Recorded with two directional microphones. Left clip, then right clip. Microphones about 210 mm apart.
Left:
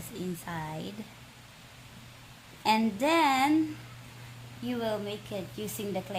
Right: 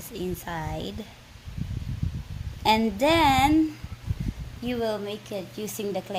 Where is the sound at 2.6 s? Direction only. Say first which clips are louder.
Right 5 dB; 35° right (ahead or behind).